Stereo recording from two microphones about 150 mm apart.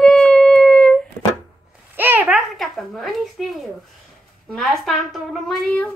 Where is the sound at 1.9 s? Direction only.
15° right (ahead or behind).